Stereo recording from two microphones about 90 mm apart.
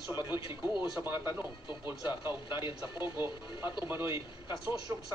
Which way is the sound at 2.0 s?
55° left (ahead or behind).